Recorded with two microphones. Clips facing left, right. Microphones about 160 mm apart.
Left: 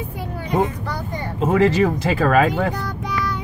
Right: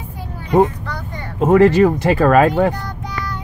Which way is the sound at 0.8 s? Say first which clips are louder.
Left 2 dB; 10° left (ahead or behind).